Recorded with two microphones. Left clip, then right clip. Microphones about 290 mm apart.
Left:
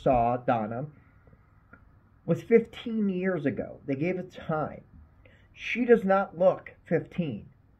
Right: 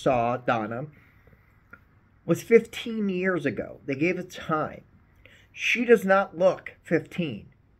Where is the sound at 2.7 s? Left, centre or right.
Centre.